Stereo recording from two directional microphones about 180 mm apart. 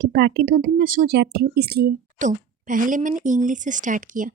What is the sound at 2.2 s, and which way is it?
A woman's voice, 45° right (ahead or behind).